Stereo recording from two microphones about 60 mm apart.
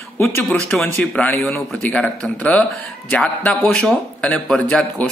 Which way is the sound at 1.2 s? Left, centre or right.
Left.